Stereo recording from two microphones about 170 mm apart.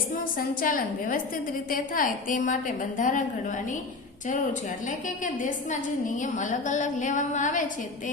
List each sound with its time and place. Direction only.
0.3 s a woman's voice: 55° left (ahead or behind)
4.9 s a woman's voice: 50° left (ahead or behind)